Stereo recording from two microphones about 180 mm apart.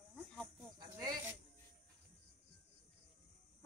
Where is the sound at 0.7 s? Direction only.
20° right (ahead or behind).